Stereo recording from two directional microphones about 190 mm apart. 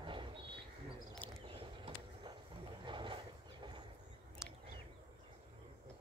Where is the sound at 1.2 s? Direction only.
10° left (ahead or behind).